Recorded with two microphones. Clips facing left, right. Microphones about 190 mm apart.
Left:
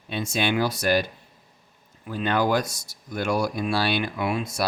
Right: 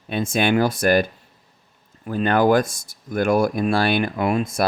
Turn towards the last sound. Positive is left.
turn(degrees=-50)  # may be behind; listen again after turning